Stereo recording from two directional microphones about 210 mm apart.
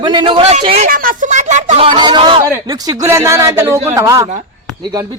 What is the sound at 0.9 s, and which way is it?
Speech, 40° right (ahead or behind).